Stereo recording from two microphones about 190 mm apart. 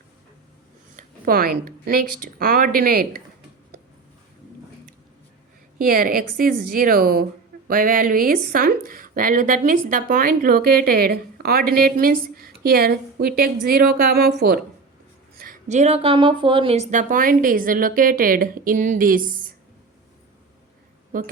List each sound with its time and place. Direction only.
0.9 s a woman's voice: 50° right (ahead or behind)
5.8 s a woman's voice: 50° right (ahead or behind)
15.4 s a woman's voice: 45° right (ahead or behind)
21.1 s a woman's voice: 45° right (ahead or behind)